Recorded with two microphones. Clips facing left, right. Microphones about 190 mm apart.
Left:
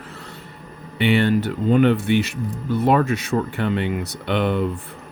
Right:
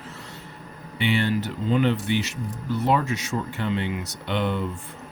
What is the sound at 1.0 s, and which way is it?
Speech, 60° left (ahead or behind).